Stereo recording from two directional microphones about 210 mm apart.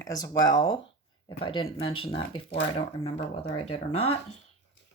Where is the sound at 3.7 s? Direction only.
30° left (ahead or behind).